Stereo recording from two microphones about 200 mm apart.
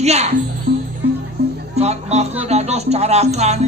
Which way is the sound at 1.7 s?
35° right (ahead or behind).